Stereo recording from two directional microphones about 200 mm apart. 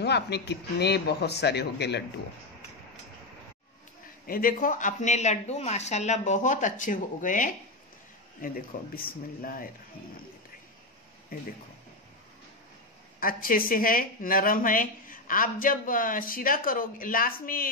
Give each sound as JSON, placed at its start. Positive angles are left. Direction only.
{"t": 0.0, "sound": "speech", "side_deg": 55}
{"t": 4.3, "sound": "a woman's voice", "side_deg": 45}
{"t": 13.2, "sound": "a woman's voice", "side_deg": 45}